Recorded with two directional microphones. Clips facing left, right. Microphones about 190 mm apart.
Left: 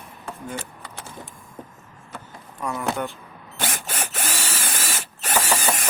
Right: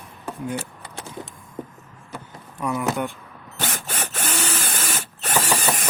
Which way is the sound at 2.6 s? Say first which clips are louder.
Right 3 dB; 10° right (ahead or behind).